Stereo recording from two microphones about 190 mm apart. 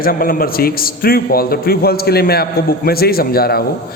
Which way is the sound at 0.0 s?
50° left (ahead or behind).